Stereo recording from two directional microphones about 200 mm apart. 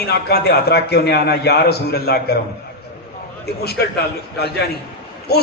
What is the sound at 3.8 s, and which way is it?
Speech, 55° left (ahead or behind).